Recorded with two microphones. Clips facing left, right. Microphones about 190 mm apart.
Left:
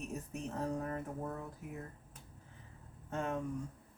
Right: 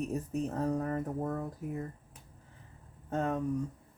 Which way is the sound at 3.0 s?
40° right (ahead or behind).